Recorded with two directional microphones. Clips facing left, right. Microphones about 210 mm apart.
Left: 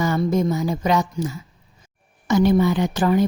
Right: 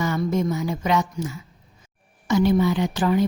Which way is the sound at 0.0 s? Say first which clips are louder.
Left 3 dB; 35° left (ahead or behind).